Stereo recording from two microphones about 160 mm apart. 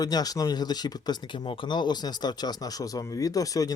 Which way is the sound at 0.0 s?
25° left (ahead or behind).